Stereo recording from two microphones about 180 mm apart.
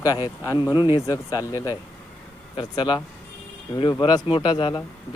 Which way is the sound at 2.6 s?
25° left (ahead or behind).